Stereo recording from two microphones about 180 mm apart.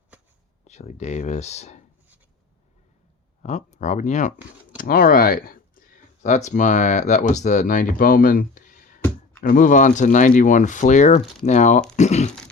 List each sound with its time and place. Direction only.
0.6 s speech: 40° left (ahead or behind)
3.4 s speech: 40° left (ahead or behind)
4.8 s speech: 55° left (ahead or behind)
6.2 s speech: 40° left (ahead or behind)